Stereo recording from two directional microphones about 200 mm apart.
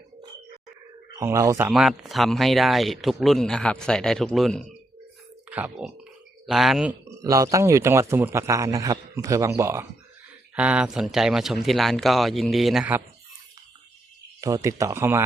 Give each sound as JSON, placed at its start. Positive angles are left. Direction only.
{"t": 1.2, "sound": "speech", "side_deg": -15}
{"t": 7.2, "sound": "a man's voice", "side_deg": -15}
{"t": 14.4, "sound": "a man's voice", "side_deg": -15}